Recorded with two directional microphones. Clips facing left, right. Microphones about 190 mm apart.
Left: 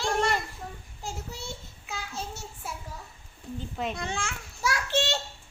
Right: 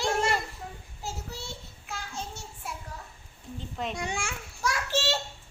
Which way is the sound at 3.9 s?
10° right (ahead or behind).